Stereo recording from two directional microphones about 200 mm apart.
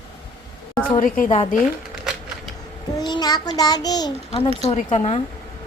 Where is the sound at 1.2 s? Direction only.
30° left (ahead or behind).